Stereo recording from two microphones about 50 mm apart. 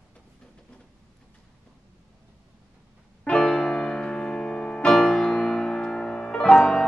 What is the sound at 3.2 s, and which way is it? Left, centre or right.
Music, centre.